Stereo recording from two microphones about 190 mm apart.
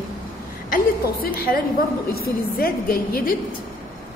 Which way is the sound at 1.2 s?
50° left (ahead or behind).